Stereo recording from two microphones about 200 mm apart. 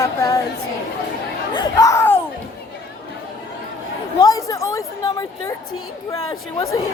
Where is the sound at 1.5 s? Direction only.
20° left (ahead or behind).